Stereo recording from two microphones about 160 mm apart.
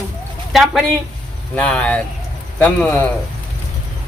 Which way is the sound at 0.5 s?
Centre (ahead or behind).